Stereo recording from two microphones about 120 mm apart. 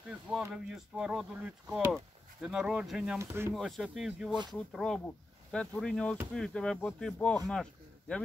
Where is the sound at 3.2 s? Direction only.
20° right (ahead or behind).